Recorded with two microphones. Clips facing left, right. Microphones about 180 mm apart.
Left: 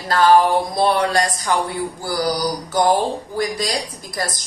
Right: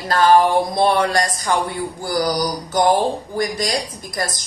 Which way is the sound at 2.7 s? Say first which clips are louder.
Right 1 dB; 20° right (ahead or behind).